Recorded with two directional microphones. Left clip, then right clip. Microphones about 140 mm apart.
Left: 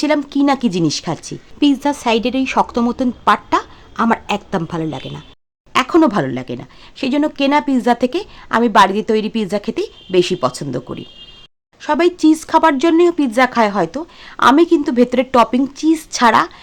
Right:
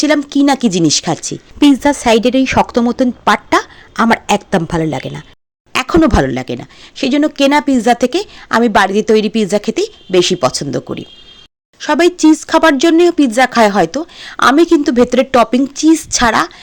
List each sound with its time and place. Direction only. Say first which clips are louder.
0.0 s speech: right 4 dB; 20° right (ahead or behind)